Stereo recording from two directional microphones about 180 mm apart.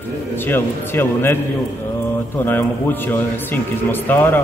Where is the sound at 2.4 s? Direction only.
10° left (ahead or behind).